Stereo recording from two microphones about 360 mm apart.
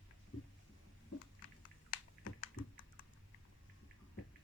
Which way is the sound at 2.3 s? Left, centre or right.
Left.